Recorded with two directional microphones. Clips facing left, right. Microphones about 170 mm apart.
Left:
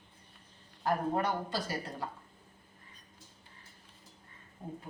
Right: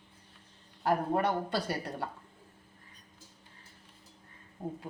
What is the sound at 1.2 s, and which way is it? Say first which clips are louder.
Speech: right 3 dB; 60° right (ahead or behind).